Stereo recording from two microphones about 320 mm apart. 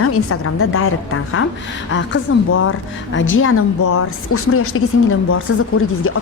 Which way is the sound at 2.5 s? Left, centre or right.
Left.